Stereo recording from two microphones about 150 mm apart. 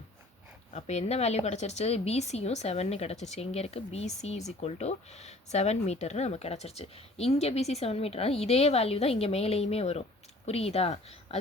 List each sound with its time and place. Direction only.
0.7 s a woman's voice: 45° left (ahead or behind)